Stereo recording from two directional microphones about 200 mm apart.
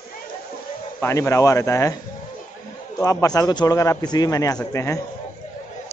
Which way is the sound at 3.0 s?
15° left (ahead or behind).